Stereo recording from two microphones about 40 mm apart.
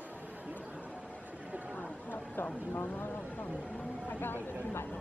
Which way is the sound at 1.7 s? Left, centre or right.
Left.